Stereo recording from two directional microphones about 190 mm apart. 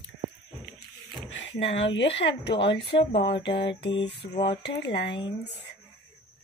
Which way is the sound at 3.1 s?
25° left (ahead or behind).